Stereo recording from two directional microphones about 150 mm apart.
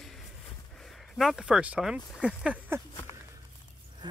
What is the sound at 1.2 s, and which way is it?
Speech, centre (ahead or behind).